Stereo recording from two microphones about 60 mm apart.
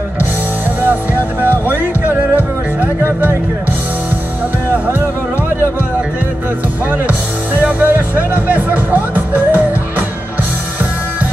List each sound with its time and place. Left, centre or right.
0.8 s music: right
7.6 s music: right